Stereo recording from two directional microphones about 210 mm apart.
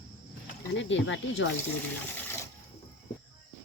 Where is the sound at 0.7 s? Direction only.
60° left (ahead or behind).